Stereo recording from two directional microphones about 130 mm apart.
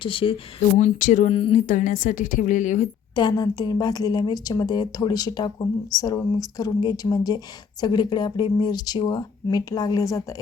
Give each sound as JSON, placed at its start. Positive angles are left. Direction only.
{"t": 0.0, "sound": "speech", "side_deg": 40}
{"t": 0.8, "sound": "a woman's voice", "side_deg": 75}
{"t": 1.3, "sound": "speech", "side_deg": 45}
{"t": 1.5, "sound": "a woman's voice", "side_deg": 80}
{"t": 3.2, "sound": "a woman's voice", "side_deg": 30}